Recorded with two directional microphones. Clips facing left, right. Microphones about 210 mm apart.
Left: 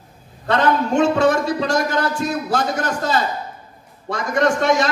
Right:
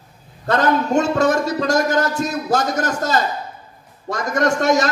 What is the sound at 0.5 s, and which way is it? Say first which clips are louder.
A man's voice: even; 45° right (ahead or behind).